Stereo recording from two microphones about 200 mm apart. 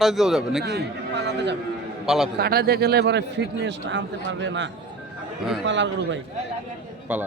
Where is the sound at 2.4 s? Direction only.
50° right (ahead or behind); by 6.2 s 65° right (ahead or behind).